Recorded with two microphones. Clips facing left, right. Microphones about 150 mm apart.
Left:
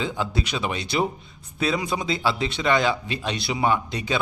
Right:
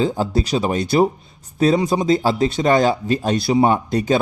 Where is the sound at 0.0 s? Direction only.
40° right (ahead or behind).